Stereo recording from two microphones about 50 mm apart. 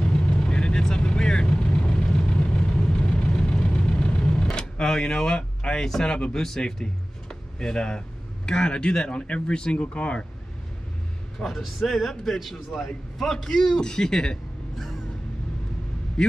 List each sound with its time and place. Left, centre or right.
0.0 s vehicle: centre
3.3 s vehicle: centre
6.0 s speech: centre
11.4 s a man's voice: centre
16.2 s speech: centre